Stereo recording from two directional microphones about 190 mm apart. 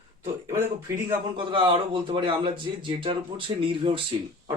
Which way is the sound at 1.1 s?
25° right (ahead or behind).